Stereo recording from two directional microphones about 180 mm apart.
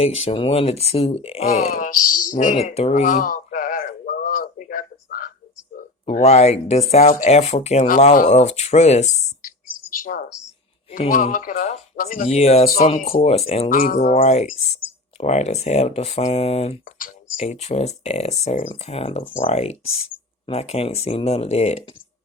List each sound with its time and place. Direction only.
0.0 s speech: 35° left (ahead or behind)
2.3 s a sound: 45° left (ahead or behind)
6.1 s speech: 35° left (ahead or behind)
10.0 s a sound: 50° left (ahead or behind)
11.1 s speech: 50° left (ahead or behind)
13.7 s speech: 50° left (ahead or behind)
16.8 s speech: 50° left (ahead or behind)